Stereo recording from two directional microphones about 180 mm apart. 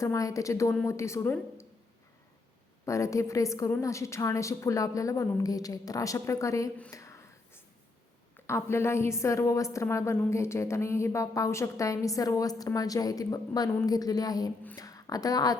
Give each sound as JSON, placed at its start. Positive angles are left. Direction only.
{"t": 0.0, "sound": "a woman's voice", "side_deg": 20}
{"t": 2.8, "sound": "a woman's voice", "side_deg": 15}
{"t": 6.9, "sound": "a sound", "side_deg": 15}
{"t": 8.4, "sound": "a woman's voice", "side_deg": 15}